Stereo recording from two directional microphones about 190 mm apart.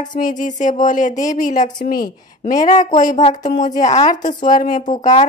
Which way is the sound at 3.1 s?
40° left (ahead or behind).